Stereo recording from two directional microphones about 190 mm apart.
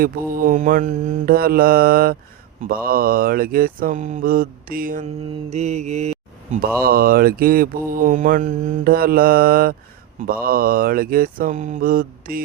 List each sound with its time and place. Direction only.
0.0 s mantra: 45° right (ahead or behind)
5.5 s mantra: 35° right (ahead or behind)
6.8 s mantra: 50° right (ahead or behind)